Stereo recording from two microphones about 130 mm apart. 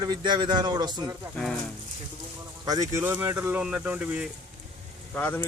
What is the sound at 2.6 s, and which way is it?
Speech, 30° right (ahead or behind).